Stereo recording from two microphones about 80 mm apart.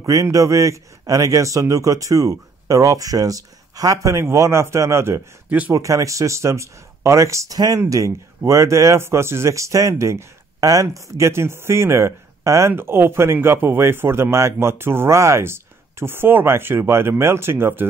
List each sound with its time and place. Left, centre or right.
0.0 s a man's voice: right